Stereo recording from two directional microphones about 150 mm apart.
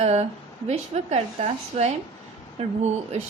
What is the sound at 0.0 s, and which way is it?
A woman's voice, 45° right (ahead or behind).